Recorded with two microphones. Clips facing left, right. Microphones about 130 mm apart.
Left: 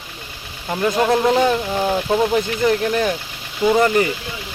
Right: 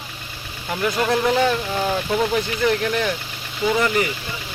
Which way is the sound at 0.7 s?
25° left (ahead or behind).